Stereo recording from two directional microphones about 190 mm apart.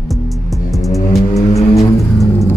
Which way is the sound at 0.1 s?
Centre (ahead or behind).